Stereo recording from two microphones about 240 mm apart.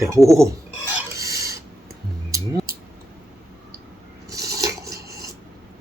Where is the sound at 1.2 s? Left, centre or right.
Centre.